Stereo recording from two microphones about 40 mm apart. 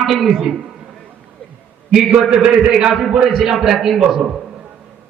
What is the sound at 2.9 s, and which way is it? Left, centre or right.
Speech, centre.